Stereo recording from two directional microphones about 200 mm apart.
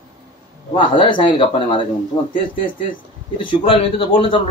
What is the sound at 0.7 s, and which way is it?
Speech, 25° left (ahead or behind).